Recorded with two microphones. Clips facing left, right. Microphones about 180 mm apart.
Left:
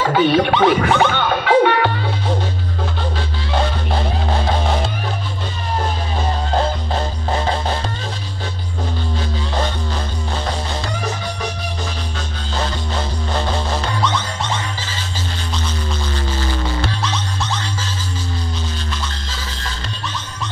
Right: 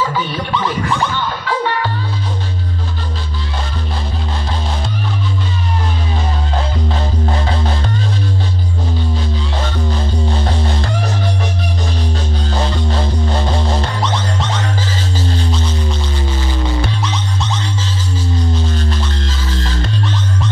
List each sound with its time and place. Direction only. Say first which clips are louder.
0.1 s music: left 6 dB; 70° left (ahead or behind)